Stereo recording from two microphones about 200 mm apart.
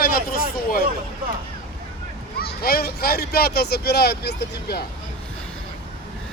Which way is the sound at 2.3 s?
50° left (ahead or behind).